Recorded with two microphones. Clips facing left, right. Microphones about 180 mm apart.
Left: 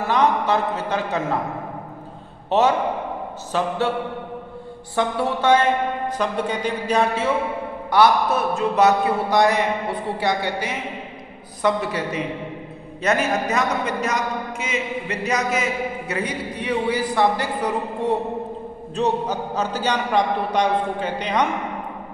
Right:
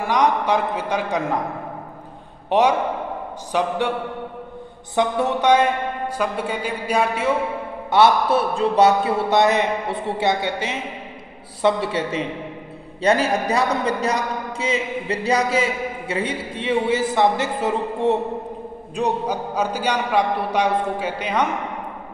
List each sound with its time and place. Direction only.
0.0 s a man's voice: 15° right (ahead or behind)
2.5 s a man's voice: 15° right (ahead or behind)
4.9 s a man's voice: 20° right (ahead or behind)
7.9 s a man's voice: 25° right (ahead or behind)
18.9 s a man's voice: 10° right (ahead or behind)